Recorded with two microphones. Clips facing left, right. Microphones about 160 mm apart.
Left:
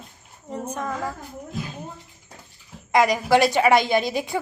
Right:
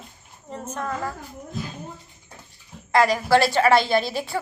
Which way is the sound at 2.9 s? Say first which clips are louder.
Even; 15° left (ahead or behind).